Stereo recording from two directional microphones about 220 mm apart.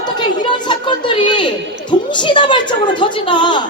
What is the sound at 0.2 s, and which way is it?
Chatter, 20° left (ahead or behind).